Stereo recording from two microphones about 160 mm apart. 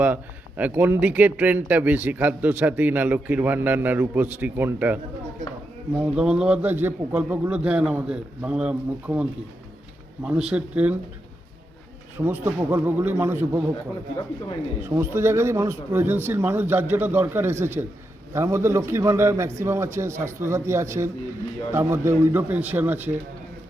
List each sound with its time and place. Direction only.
0.0 s a man's voice: 10° right (ahead or behind)
10.2 s a man's voice: 5° right (ahead or behind)
12.2 s a man's voice: 15° right (ahead or behind)
14.8 s a man's voice: 15° right (ahead or behind)